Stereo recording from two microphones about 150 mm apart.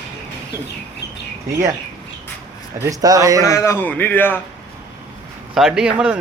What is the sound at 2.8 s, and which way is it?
Speech, 25° right (ahead or behind).